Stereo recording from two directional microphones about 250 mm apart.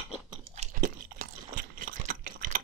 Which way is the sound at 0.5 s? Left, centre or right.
Right.